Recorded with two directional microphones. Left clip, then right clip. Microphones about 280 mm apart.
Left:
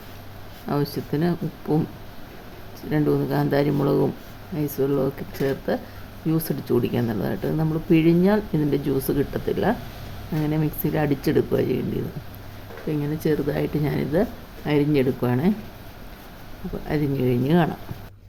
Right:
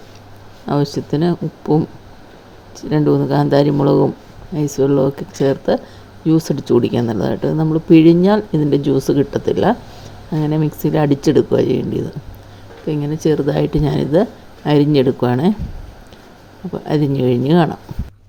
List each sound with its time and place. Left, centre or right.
0.7 s speech: centre
2.9 s speech: centre
16.9 s speech: centre